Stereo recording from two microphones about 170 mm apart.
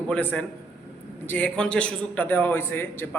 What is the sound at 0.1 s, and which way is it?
A man's voice, 10° left (ahead or behind).